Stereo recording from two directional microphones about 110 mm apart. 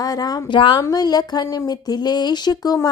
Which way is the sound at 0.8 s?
35° left (ahead or behind).